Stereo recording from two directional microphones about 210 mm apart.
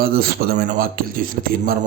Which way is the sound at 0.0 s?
45° right (ahead or behind).